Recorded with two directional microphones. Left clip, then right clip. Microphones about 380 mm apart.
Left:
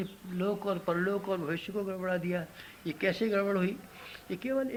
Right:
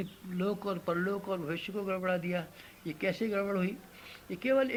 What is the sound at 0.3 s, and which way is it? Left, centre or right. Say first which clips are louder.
Speech: left 2 dB; right.